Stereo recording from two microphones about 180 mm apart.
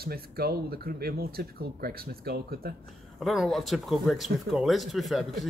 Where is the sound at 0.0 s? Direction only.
60° right (ahead or behind).